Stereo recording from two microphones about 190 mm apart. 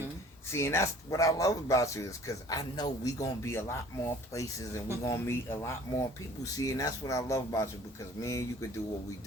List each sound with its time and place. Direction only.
0.5 s speech: 15° left (ahead or behind)